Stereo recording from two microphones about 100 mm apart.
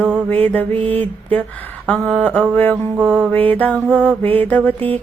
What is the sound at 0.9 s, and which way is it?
Speech, 15° left (ahead or behind).